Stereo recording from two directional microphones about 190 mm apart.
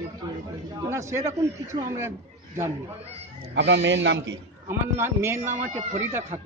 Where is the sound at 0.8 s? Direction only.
15° right (ahead or behind).